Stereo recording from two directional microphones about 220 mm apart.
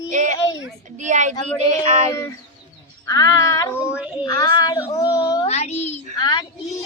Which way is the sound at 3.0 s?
15° left (ahead or behind).